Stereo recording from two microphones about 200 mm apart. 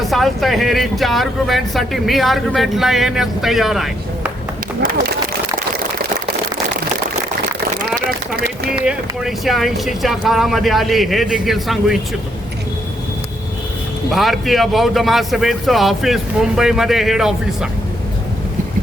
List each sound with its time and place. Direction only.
0.1 s speech: centre (ahead or behind)
4.8 s speech: 45° right (ahead or behind)
8.8 s speech: 5° right (ahead or behind)
14.1 s speech: centre (ahead or behind)